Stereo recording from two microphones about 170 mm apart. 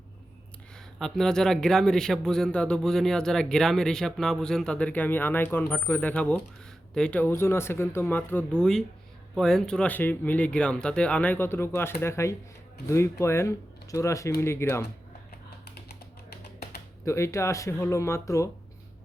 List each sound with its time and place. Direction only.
0.9 s speech: centre (ahead or behind)
17.1 s speech: 15° left (ahead or behind)